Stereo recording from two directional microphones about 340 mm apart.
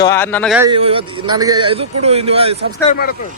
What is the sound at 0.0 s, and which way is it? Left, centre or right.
Speech, centre.